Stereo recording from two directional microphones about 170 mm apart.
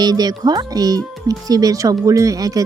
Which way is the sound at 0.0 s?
25° right (ahead or behind).